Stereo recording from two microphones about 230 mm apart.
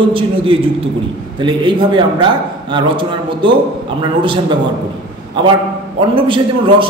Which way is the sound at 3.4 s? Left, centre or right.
Right.